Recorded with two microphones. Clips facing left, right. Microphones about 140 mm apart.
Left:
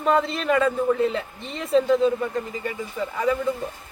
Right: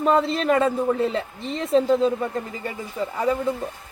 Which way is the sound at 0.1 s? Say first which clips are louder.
Even; 30° right (ahead or behind).